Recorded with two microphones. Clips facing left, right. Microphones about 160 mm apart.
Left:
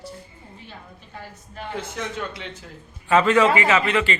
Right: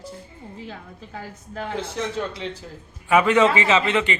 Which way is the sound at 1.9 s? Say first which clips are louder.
Right 3 dB; 30° right (ahead or behind).